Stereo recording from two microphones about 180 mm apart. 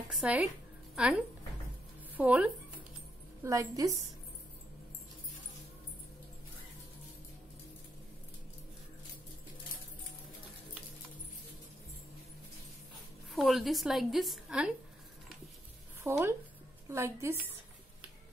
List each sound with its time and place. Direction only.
0.1 s a woman's voice: 5° right (ahead or behind)
13.3 s a woman's voice: centre (ahead or behind)
16.0 s a woman's voice: 15° right (ahead or behind)